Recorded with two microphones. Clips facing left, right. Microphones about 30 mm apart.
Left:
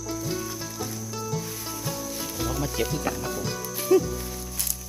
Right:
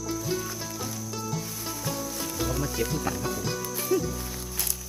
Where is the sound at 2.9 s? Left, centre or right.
Centre.